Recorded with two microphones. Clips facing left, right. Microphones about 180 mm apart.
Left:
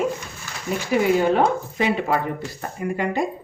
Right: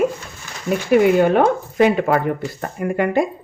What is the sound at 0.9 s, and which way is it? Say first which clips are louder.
Speech: right 5 dB; 60° right (ahead or behind).